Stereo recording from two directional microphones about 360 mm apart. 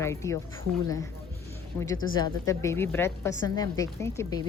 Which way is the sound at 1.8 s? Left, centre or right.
Centre.